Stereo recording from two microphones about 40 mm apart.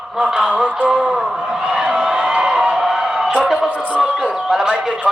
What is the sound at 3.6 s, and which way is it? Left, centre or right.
Speech, right.